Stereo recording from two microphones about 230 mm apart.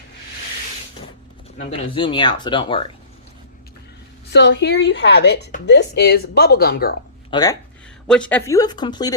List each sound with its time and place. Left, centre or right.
2.0 s speech: centre
4.3 s a woman's voice: left
7.3 s speech: centre
8.0 s speech: centre